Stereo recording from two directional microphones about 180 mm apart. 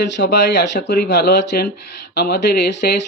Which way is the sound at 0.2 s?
70° left (ahead or behind).